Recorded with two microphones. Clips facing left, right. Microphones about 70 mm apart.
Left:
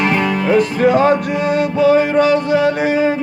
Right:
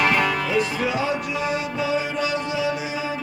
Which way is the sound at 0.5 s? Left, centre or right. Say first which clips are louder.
Left 10 dB; left.